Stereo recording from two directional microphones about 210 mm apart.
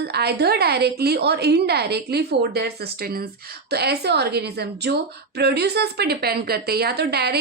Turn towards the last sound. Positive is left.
turn(degrees=-50)  # may be behind; listen again after turning